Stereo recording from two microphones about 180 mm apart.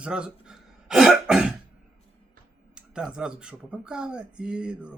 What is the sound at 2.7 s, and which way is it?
Speech, 5° right (ahead or behind).